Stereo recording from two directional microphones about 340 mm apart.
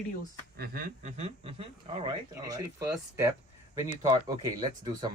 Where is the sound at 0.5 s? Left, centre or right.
Right; by 3.2 s centre.